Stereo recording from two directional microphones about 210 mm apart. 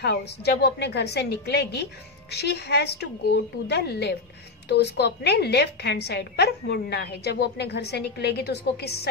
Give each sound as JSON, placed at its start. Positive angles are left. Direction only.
{"t": 0.0, "sound": "a woman's voice", "side_deg": 50}